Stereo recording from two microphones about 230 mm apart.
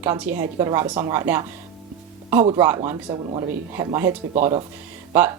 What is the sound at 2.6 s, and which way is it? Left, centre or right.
Speech, centre.